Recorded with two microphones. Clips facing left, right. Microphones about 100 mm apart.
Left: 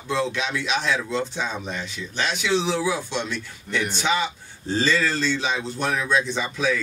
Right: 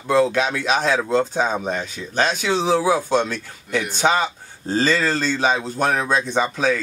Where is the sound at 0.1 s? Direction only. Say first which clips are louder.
Right 7 dB; 45° right (ahead or behind).